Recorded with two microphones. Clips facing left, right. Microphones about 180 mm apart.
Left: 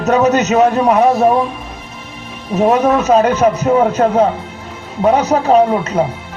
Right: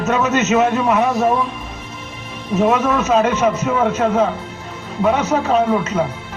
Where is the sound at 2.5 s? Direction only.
35° left (ahead or behind).